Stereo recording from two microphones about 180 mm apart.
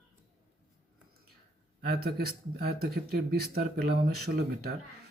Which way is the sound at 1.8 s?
60° right (ahead or behind).